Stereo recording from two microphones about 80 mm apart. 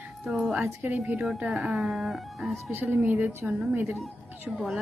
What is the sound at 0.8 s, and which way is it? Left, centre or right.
Speech, right.